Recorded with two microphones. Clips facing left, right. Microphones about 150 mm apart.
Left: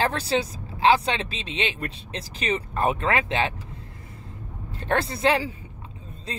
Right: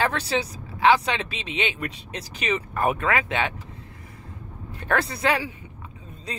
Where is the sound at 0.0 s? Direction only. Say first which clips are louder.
Left 1 dB; 30° left (ahead or behind).